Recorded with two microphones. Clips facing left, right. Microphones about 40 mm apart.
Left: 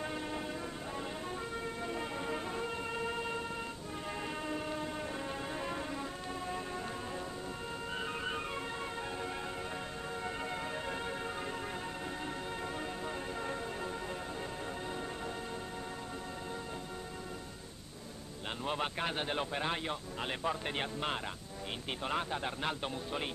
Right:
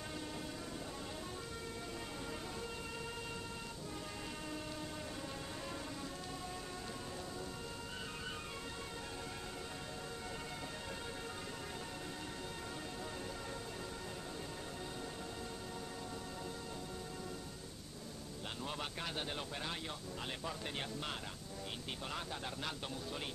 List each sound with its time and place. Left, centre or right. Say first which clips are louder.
0.0 s music: left 7 dB; left
1.9 s music: left 8 dB; left
4.5 s train: left 7 dB; left
5.5 s music: left 7 dB; left
7.9 s music: left 11 dB; left
10.2 s music: left 7 dB; left
12.6 s music: left 6 dB; left
18.6 s a man's voice: left 9 dB; left